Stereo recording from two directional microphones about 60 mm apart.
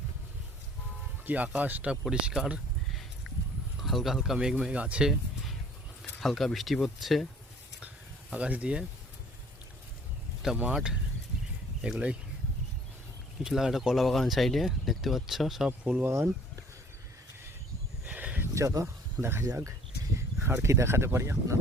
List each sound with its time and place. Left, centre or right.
1.2 s speech: right
1.9 s speech: centre
2.9 s a sound: centre
3.8 s speech: centre
4.7 s speech: right
6.0 s speech: centre
8.3 s speech: right
10.7 s speech: centre
13.4 s speech: centre
15.8 s speech: centre
16.0 s speech: right
18.0 s a sound: right
18.5 s speech: right
19.2 s speech: right